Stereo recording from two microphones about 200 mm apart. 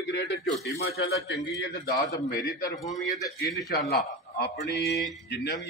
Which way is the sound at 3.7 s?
55° left (ahead or behind).